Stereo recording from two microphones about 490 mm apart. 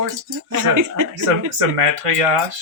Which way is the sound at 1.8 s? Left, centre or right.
Right.